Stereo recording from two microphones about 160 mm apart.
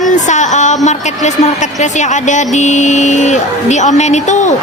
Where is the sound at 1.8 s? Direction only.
50° left (ahead or behind).